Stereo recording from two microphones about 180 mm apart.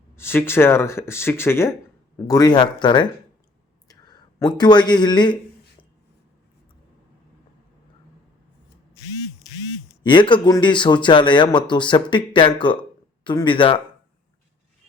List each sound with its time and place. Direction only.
0.2 s speech: 15° left (ahead or behind)
9.9 s speech: 25° left (ahead or behind)